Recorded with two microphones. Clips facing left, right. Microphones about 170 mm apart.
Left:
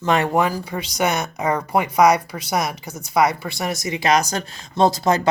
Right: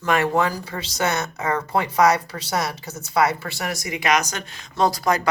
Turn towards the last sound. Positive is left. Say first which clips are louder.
# left 3 dB
turn(degrees=25)  # may be behind; listen again after turning